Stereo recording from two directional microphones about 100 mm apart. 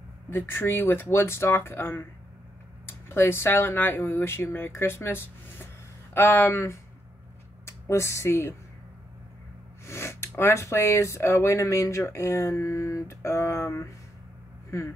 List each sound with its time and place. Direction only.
0.3 s speech: 20° left (ahead or behind)
9.8 s speech: 25° left (ahead or behind)